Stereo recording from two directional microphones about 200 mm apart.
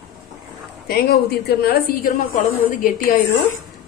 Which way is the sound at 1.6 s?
50° left (ahead or behind).